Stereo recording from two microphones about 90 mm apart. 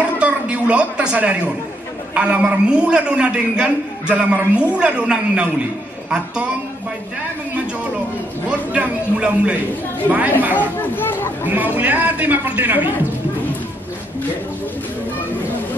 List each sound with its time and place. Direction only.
0.2 s a man's voice: 15° right (ahead or behind)
8.5 s a man's voice: 10° right (ahead or behind)
10.5 s speech: 20° left (ahead or behind)
11.4 s a man's voice: 20° right (ahead or behind)